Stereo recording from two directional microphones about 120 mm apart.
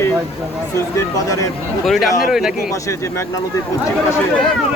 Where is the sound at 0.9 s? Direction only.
25° left (ahead or behind).